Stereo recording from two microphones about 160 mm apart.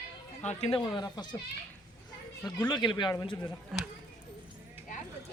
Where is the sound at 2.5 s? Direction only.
25° left (ahead or behind).